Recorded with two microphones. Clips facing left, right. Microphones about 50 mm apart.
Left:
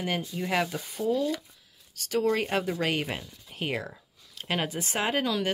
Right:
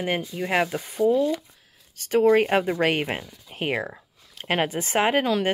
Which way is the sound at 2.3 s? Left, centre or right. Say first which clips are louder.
Right 8 dB; right.